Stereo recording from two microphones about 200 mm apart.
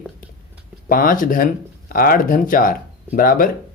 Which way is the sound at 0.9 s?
45° left (ahead or behind).